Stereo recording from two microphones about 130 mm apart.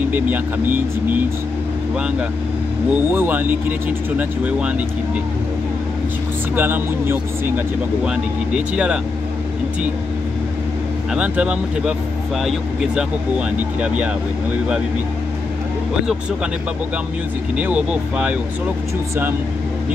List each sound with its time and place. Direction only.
0.1 s speech: 15° right (ahead or behind)
2.9 s speech: 15° right (ahead or behind)
6.5 s speech: 15° right (ahead or behind)
11.1 s speech: 10° right (ahead or behind)
13.6 s speech: 10° right (ahead or behind)
17.6 s speech: 10° right (ahead or behind)